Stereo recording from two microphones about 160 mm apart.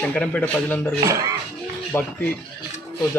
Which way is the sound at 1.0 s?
20° right (ahead or behind).